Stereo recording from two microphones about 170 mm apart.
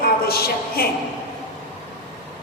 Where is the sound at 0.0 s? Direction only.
65° left (ahead or behind).